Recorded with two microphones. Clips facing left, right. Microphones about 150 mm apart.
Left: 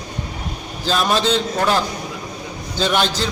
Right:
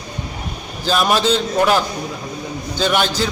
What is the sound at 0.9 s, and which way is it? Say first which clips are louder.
Speech: right 2 dB; 10° right (ahead or behind).